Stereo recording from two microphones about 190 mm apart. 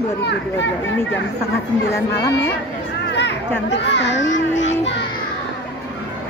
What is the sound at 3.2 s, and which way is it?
A child's voice, 70° left (ahead or behind).